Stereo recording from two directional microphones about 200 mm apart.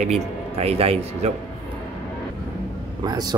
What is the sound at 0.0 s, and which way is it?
A man's voice, 30° right (ahead or behind).